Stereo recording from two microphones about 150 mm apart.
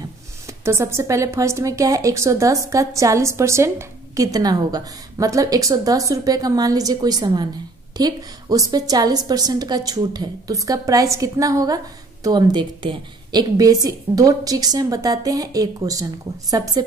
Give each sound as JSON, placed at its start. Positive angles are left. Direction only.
{"t": 0.7, "sound": "a woman's voice", "side_deg": -20}